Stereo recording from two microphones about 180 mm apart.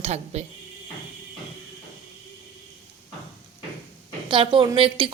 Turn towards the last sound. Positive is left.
turn(degrees=-30)  # may be behind; listen again after turning